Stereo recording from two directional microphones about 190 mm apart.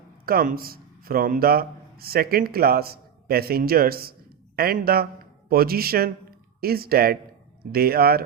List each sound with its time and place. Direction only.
0.3 s a man's voice: 50° right (ahead or behind)